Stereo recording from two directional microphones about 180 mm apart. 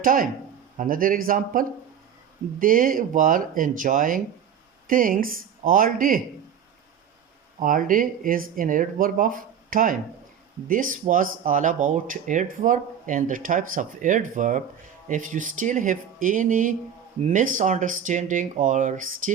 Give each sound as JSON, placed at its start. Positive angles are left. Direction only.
{"t": 0.0, "sound": "speech", "side_deg": -50}
{"t": 7.6, "sound": "speech", "side_deg": -50}